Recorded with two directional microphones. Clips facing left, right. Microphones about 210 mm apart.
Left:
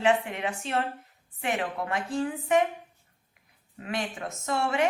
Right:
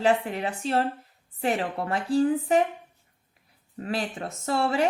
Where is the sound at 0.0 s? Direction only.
35° right (ahead or behind).